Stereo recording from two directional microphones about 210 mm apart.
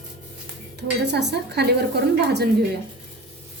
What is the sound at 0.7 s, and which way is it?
Speech, 55° right (ahead or behind).